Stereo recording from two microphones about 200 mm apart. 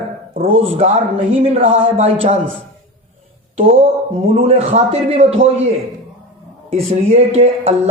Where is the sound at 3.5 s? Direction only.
30° right (ahead or behind).